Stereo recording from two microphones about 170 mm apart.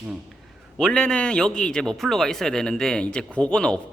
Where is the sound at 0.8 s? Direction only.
5° left (ahead or behind).